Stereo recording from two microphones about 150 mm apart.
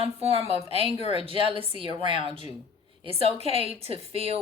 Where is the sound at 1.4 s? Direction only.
35° right (ahead or behind).